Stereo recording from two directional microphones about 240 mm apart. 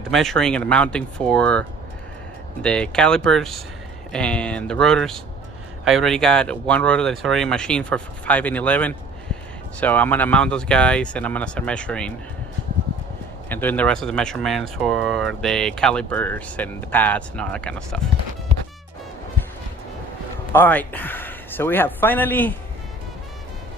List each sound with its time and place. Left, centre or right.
0.1 s speech: centre
13.5 s speech: centre
20.5 s speech: centre